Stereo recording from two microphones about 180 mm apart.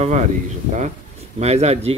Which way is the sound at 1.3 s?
35° right (ahead or behind).